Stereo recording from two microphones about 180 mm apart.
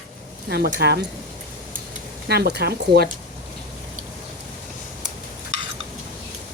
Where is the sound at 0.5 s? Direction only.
60° right (ahead or behind).